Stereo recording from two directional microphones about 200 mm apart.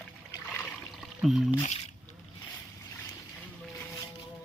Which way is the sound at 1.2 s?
Centre (ahead or behind).